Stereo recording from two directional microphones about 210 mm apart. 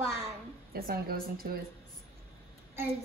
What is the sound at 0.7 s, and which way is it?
Speech, 45° right (ahead or behind).